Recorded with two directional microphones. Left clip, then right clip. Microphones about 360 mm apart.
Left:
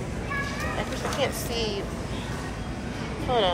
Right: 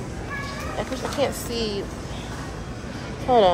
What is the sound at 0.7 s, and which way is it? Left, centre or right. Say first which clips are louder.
Speech: right 4 dB; centre.